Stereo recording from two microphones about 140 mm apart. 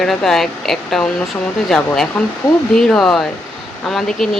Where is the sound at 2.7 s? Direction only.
5° left (ahead or behind).